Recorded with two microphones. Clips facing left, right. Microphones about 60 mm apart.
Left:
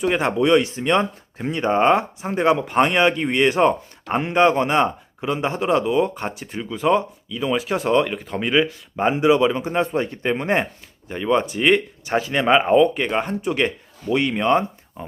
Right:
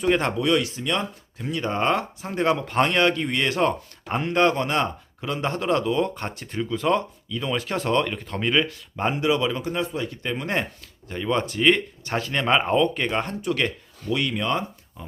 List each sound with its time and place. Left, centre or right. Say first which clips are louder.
0.0 s speech: left 1 dB; centre
0.3 s speech: left 5 dB; left
9.8 s speech: left 6 dB; left; by 13.3 s centre
13.4 s speech: left 3 dB; left